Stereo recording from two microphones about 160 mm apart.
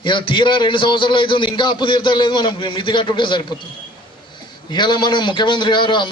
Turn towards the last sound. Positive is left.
turn(degrees=30)  # may be behind; listen again after turning